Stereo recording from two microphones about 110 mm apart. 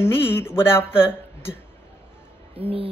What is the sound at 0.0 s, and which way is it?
Speech, 20° left (ahead or behind).